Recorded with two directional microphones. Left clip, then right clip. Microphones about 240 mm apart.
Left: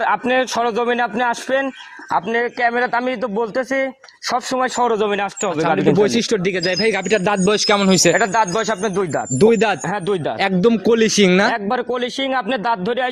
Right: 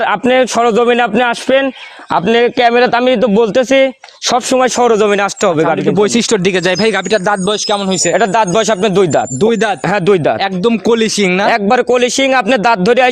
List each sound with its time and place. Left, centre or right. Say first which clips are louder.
0.0 s a man's voice: right 6 dB; right
2.6 s a man's voice: right 8 dB; right
5.7 s speech: right 3 dB; centre
6.1 s a man's voice: right 6 dB; right
7.5 s a man's voice: right 1 dB; centre
8.1 s a man's voice: right 6 dB; right
9.5 s speech: right 1 dB; right
9.9 s a man's voice: right 10 dB; right
10.6 s speech: even; right
11.2 s speech: right 2 dB; centre
11.5 s a man's voice: right 10 dB; right